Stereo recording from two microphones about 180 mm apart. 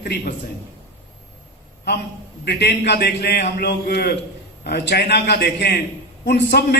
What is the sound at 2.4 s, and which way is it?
A man's voice, 65° left (ahead or behind).